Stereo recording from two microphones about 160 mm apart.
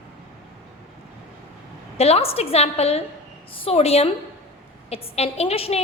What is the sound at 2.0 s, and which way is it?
A woman's voice, 40° left (ahead or behind).